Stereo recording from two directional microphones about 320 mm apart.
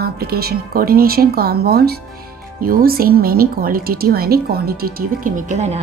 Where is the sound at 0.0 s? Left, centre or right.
Right.